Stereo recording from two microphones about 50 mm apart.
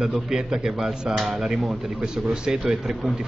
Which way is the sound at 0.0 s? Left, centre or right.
Centre.